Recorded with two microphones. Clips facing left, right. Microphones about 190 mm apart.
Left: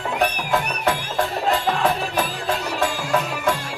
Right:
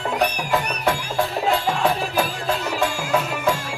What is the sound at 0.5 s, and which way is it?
Music, centre (ahead or behind).